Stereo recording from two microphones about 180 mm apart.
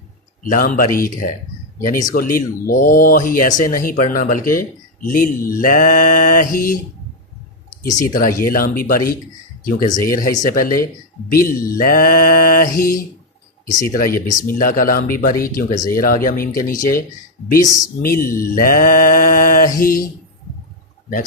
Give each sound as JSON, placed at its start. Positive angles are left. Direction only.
{"t": 0.4, "sound": "speech", "side_deg": 50}
{"t": 7.9, "sound": "speech", "side_deg": 50}
{"t": 10.4, "sound": "speech", "side_deg": 50}
{"t": 14.1, "sound": "speech", "side_deg": 20}
{"t": 14.4, "sound": "speech", "side_deg": 50}
{"t": 17.6, "sound": "speech", "side_deg": 20}
{"t": 18.0, "sound": "speech", "side_deg": 55}